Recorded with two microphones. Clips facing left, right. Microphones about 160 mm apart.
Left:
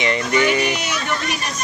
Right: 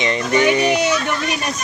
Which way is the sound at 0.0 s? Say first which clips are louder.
Right 2 dB; 20° right (ahead or behind).